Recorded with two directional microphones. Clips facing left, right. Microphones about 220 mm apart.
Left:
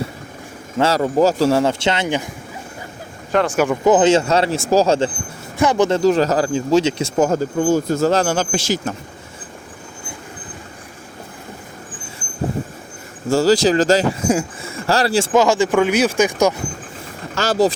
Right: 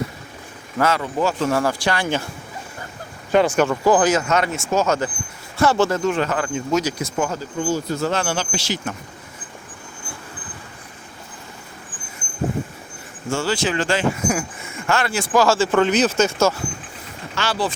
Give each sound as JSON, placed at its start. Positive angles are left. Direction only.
{"t": 0.8, "sound": "speech", "side_deg": 35}
{"t": 3.3, "sound": "speech", "side_deg": 0}
{"t": 3.6, "sound": "speech", "side_deg": 20}
{"t": 5.5, "sound": "speech", "side_deg": 15}
{"t": 6.0, "sound": "speech", "side_deg": 35}
{"t": 7.3, "sound": "speech", "side_deg": 50}
{"t": 13.3, "sound": "speech", "side_deg": 40}
{"t": 17.3, "sound": "speech", "side_deg": 40}